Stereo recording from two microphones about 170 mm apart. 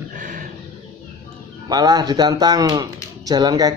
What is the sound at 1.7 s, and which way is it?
Speech, 25° right (ahead or behind).